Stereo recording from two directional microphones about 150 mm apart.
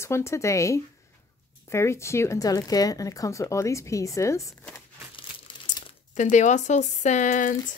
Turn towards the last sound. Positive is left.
turn(degrees=55)  # may be behind; listen again after turning